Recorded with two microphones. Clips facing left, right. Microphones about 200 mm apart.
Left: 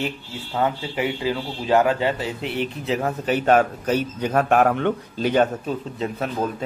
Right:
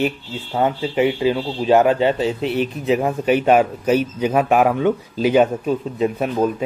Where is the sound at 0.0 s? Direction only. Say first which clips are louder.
Right 6 dB; 25° right (ahead or behind).